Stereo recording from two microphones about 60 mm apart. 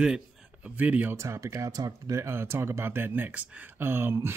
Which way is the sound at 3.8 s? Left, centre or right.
Right.